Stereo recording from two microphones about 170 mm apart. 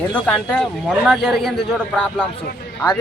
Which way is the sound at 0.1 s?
5° left (ahead or behind).